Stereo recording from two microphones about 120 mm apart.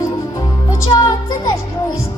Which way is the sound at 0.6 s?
25° left (ahead or behind).